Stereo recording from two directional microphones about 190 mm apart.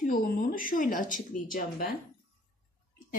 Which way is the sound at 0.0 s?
45° left (ahead or behind).